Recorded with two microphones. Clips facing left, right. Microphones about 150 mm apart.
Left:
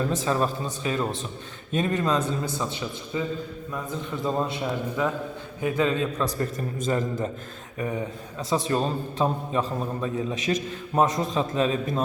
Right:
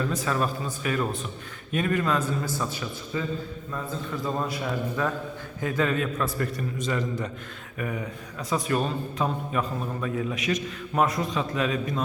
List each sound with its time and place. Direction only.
0.2 s a man's voice: 30° left (ahead or behind)
6.2 s a man's voice: 40° left (ahead or behind)
7.8 s a man's voice: 25° left (ahead or behind)